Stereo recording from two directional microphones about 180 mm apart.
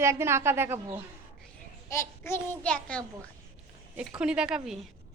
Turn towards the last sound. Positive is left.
turn(degrees=-5)  # may be behind; listen again after turning